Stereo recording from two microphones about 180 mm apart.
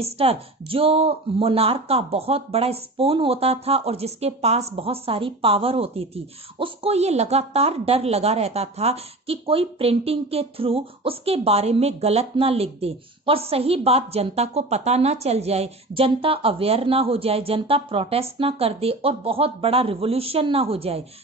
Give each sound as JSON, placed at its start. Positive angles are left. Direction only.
{"t": 0.0, "sound": "speech", "side_deg": -35}